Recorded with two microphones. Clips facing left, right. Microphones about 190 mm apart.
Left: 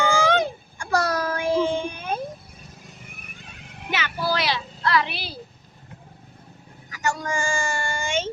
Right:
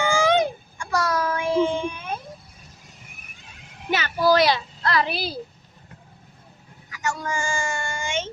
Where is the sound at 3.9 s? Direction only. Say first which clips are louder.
Right 6 dB; 40° right (ahead or behind).